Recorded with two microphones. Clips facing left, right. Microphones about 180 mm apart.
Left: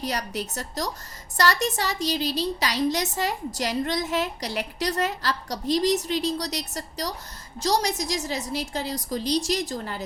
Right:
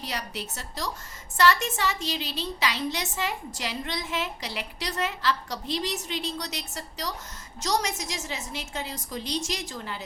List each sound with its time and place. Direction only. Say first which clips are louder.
0.0 s a woman's voice: left 5 dB; 40° left (ahead or behind)